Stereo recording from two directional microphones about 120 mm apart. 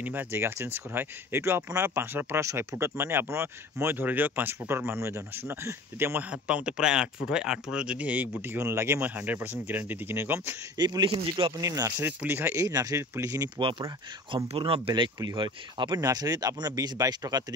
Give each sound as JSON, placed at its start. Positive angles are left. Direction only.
{"t": 0.0, "sound": "speech", "side_deg": -15}
{"t": 10.8, "sound": "speech", "side_deg": -40}
{"t": 11.6, "sound": "speech", "side_deg": -30}
{"t": 13.6, "sound": "speech", "side_deg": -45}